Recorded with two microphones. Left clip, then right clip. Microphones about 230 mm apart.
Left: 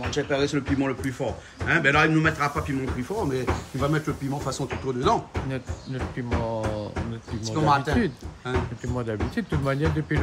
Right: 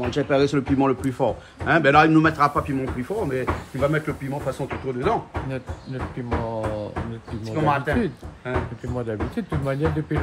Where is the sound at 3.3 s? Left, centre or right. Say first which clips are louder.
Right 2 dB; centre.